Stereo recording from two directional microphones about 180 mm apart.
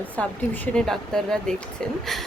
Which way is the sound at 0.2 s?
10° left (ahead or behind).